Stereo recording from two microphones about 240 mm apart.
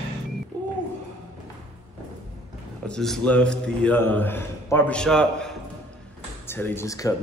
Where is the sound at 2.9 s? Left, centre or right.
Centre.